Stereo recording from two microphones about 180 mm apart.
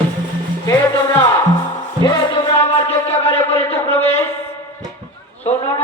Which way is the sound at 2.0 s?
25° left (ahead or behind).